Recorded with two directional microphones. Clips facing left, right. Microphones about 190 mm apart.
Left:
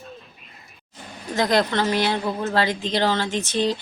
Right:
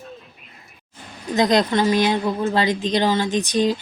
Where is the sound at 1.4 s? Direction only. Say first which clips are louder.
Right 3 dB; 20° right (ahead or behind).